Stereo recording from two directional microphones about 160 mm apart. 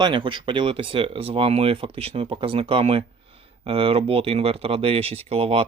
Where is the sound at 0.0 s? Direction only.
30° right (ahead or behind).